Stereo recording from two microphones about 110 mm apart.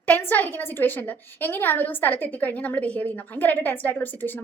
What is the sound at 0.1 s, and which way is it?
A woman's voice, 15° left (ahead or behind).